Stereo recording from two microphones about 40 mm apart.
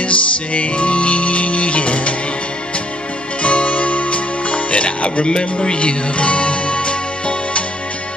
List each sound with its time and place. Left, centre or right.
0.0 s music: left
3.4 s music: left